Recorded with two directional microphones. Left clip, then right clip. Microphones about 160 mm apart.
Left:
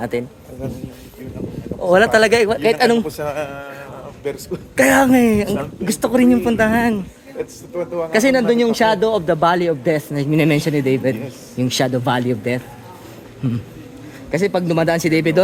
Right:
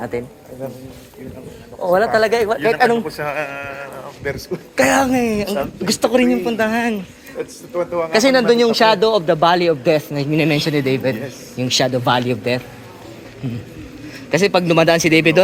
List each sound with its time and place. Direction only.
0.0 s a woman's voice: 45° left (ahead or behind)
1.9 s speech: 55° left (ahead or behind)
2.6 s a woman's voice: 45° left (ahead or behind)
4.7 s a woman's voice: 50° left (ahead or behind)
6.0 s a man's voice: 35° left (ahead or behind)
6.2 s a woman's voice: 55° left (ahead or behind)
6.7 s a man's voice: 40° left (ahead or behind)
7.3 s a man's voice: 10° left (ahead or behind)
8.1 s a man's voice: 35° left (ahead or behind)
14.3 s speech: 20° left (ahead or behind)